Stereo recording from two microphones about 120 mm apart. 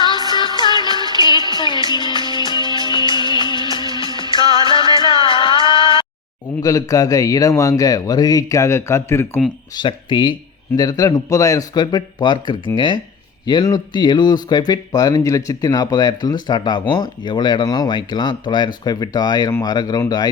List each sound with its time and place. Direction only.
0.3 s music: 40° left (ahead or behind)
4.9 s music: 45° left (ahead or behind)
6.6 s a man's voice: 30° left (ahead or behind)
9.7 s speech: 40° left (ahead or behind)
10.8 s speech: 30° left (ahead or behind)